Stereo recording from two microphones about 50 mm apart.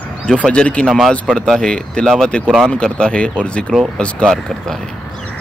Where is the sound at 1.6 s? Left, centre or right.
Centre.